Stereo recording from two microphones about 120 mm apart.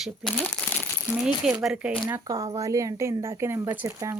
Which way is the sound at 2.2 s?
30° right (ahead or behind).